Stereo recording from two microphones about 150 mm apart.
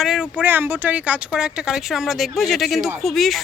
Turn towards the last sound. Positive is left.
turn(degrees=0)  # may be behind; listen again after turning